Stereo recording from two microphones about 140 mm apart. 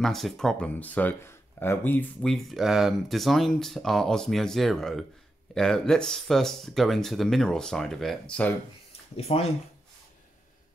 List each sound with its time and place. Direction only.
0.0 s speech: 5° left (ahead or behind)
2.3 s speech: centre (ahead or behind)
9.1 s speech: 45° left (ahead or behind)